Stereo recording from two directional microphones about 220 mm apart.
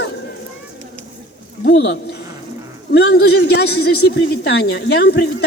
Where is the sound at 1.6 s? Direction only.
55° left (ahead or behind).